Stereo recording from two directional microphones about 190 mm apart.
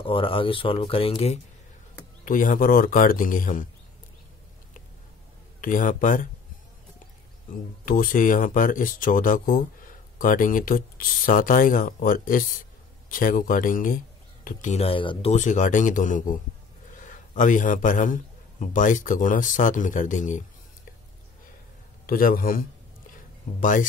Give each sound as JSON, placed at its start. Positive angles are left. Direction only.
{"t": 0.0, "sound": "speech", "side_deg": 30}
{"t": 2.2, "sound": "speech", "side_deg": 45}
{"t": 5.6, "sound": "speech", "side_deg": 45}
{"t": 7.8, "sound": "speech", "side_deg": 45}
{"t": 15.3, "sound": "a man's voice", "side_deg": 40}
{"t": 22.0, "sound": "speech", "side_deg": 50}
{"t": 23.6, "sound": "speech", "side_deg": 45}